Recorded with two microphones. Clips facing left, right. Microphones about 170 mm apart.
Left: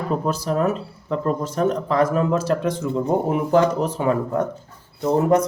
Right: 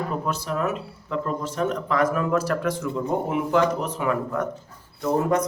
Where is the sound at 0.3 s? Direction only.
35° left (ahead or behind).